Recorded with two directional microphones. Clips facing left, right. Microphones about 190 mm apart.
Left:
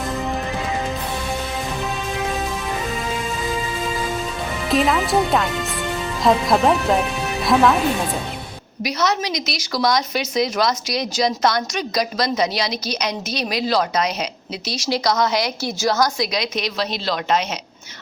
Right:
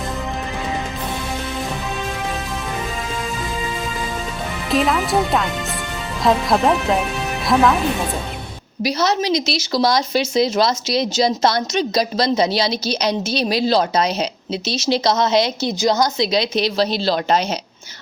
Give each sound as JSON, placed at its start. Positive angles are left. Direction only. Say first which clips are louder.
{"t": 4.7, "sound": "speech", "louder": "even", "side_deg": 0}
{"t": 8.8, "sound": "a woman's voice", "louder": "right 3 dB", "side_deg": -30}